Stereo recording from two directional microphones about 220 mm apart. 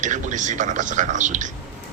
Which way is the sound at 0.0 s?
35° right (ahead or behind).